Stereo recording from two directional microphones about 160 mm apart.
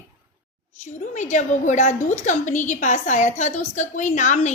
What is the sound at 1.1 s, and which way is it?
A woman's voice, 50° left (ahead or behind).